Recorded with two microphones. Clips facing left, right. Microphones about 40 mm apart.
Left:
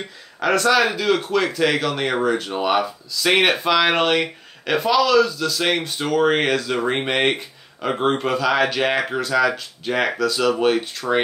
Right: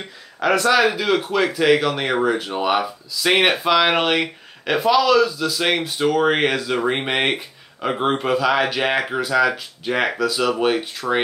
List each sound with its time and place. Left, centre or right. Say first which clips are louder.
0.4 s speech: right 1 dB; centre